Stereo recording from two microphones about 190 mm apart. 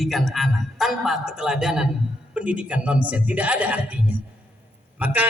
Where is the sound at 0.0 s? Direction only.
Centre (ahead or behind).